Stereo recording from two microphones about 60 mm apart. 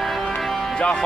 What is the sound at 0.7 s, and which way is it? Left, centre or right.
Speech, centre.